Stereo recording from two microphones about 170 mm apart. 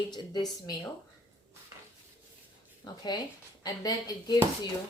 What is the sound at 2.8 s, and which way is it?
Speech, 25° left (ahead or behind).